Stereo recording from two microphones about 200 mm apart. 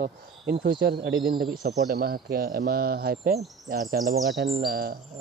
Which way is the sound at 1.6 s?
50° right (ahead or behind).